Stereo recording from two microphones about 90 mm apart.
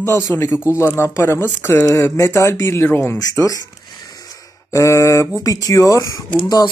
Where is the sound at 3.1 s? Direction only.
40° left (ahead or behind).